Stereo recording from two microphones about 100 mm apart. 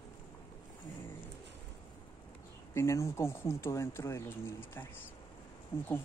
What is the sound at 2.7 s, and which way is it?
Speech, 30° left (ahead or behind).